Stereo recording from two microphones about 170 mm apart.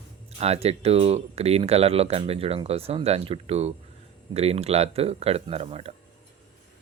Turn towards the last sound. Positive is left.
turn(degrees=-35)  # may be behind; listen again after turning